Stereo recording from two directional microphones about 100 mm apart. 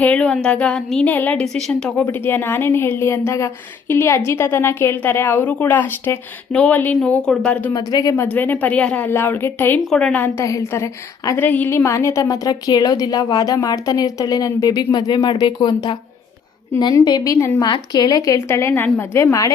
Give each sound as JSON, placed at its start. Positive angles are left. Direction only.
{"t": 0.0, "sound": "a woman's voice", "side_deg": 10}
{"t": 1.0, "sound": "a woman's voice", "side_deg": 15}
{"t": 2.0, "sound": "a woman's voice", "side_deg": 20}
{"t": 7.7, "sound": "a woman's voice", "side_deg": 40}
{"t": 8.1, "sound": "a woman's voice", "side_deg": 20}
{"t": 9.9, "sound": "a woman's voice", "side_deg": 5}
{"t": 10.2, "sound": "speech", "side_deg": 25}
{"t": 11.3, "sound": "a woman's voice", "side_deg": 15}
{"t": 11.8, "sound": "a woman's voice", "side_deg": 30}